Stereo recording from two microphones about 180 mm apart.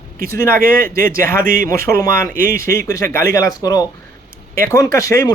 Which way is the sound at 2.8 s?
15° left (ahead or behind).